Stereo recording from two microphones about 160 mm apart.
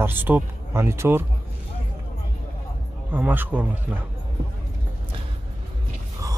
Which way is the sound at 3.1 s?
10° right (ahead or behind).